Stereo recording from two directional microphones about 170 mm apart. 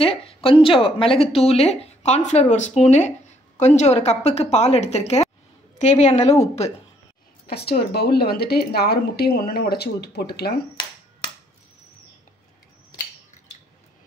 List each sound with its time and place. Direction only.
0.0 s a woman's voice: 35° left (ahead or behind)
7.4 s a woman's voice: 65° left (ahead or behind)